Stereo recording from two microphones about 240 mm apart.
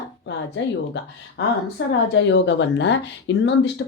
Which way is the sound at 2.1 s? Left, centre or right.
Left.